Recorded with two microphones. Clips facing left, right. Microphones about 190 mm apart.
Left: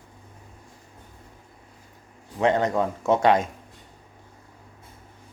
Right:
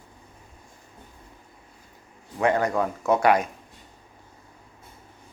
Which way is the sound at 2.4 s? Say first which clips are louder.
Left 1 dB; 20° left (ahead or behind).